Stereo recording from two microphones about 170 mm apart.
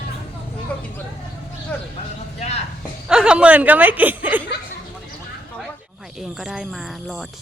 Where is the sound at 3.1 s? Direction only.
5° right (ahead or behind).